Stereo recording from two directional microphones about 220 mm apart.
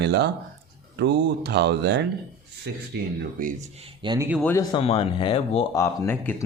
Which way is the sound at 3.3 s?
35° right (ahead or behind).